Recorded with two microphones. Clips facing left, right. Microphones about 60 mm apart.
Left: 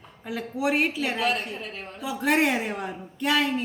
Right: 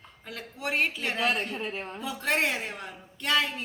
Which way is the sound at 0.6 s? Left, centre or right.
Centre.